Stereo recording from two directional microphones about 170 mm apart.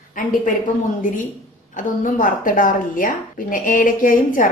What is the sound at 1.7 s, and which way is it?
A woman's voice, 50° left (ahead or behind).